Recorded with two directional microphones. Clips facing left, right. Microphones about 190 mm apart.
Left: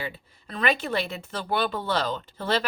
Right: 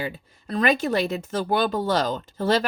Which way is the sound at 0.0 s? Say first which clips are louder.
Right 4 dB; 40° right (ahead or behind).